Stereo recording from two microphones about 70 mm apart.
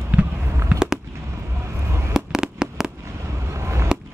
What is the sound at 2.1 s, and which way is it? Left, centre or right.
Fireworks, centre.